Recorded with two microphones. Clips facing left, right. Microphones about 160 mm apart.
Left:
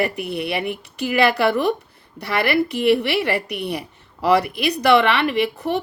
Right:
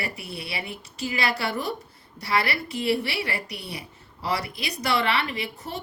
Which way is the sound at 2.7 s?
65° left (ahead or behind).